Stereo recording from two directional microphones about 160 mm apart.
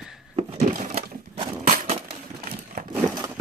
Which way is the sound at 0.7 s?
45° right (ahead or behind).